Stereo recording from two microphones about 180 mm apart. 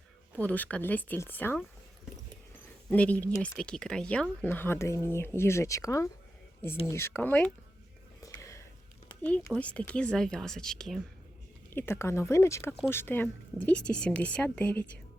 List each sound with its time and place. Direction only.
0.3 s speech: 10° left (ahead or behind)
2.9 s speech: 10° left (ahead or behind)
8.2 s whispering: 20° left (ahead or behind)
9.2 s speech: 10° left (ahead or behind)
11.7 s speech: 15° left (ahead or behind)